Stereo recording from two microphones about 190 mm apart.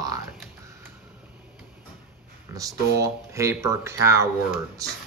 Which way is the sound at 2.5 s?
15° right (ahead or behind).